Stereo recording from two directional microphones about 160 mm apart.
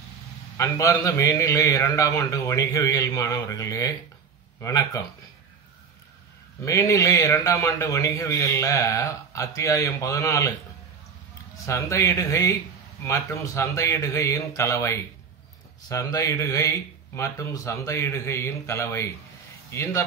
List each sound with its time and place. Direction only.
0.6 s a man's voice: 20° left (ahead or behind)
6.6 s a man's voice: 20° left (ahead or behind)
11.5 s a man's voice: 20° left (ahead or behind)